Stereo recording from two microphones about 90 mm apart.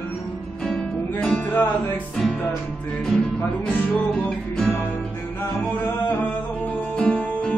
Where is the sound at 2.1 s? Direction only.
10° left (ahead or behind).